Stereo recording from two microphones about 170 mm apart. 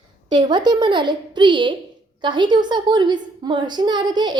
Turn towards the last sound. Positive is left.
turn(degrees=-25)  # may be behind; listen again after turning